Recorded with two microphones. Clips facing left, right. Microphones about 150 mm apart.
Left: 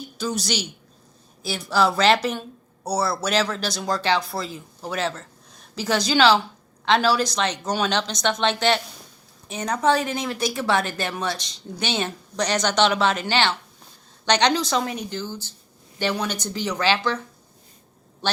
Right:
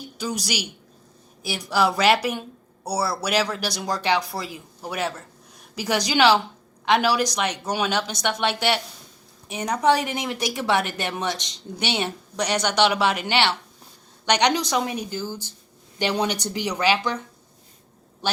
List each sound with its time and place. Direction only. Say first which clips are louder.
0.2 s speech: left 2 dB; 10° right (ahead or behind)
18.2 s quack: left 1 dB; 10° right (ahead or behind)